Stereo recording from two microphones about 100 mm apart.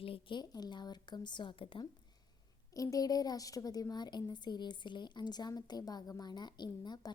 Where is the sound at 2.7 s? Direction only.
35° left (ahead or behind).